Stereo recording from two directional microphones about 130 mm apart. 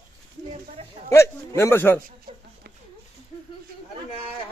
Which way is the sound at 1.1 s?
20° left (ahead or behind).